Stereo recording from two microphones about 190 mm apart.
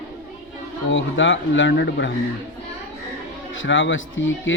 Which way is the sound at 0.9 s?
80° left.